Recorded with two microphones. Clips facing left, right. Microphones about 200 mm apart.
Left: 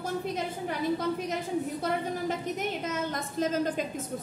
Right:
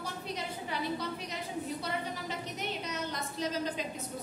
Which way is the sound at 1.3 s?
50° left (ahead or behind).